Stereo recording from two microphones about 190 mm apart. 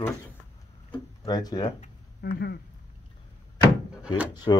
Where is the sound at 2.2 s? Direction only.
55° left (ahead or behind).